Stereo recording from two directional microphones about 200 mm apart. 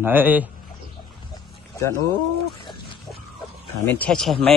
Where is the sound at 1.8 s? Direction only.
15° left (ahead or behind).